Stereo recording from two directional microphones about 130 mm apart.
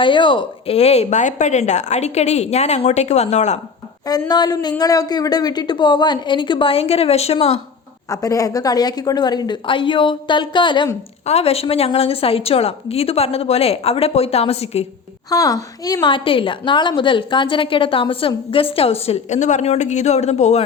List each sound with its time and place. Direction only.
0.0 s speech: 40° left (ahead or behind); by 3.6 s 60° left (ahead or behind)
4.3 s a woman's voice: 30° left (ahead or behind); by 7.6 s 50° left (ahead or behind)
8.1 s a woman's voice: 25° left (ahead or behind)
11.3 s a woman's voice: 50° left (ahead or behind)
15.3 s a woman's voice: 25° left (ahead or behind); by 20.7 s 60° left (ahead or behind)